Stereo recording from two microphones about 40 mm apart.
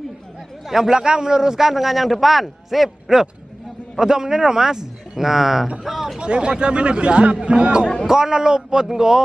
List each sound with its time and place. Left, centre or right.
0.7 s a man's voice: centre
6.1 s a man's voice: right